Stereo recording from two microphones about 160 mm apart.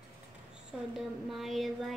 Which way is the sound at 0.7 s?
5° right (ahead or behind).